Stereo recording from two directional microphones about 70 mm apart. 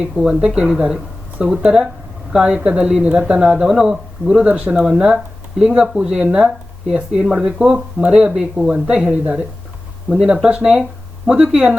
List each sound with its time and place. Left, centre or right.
0.0 s speech: centre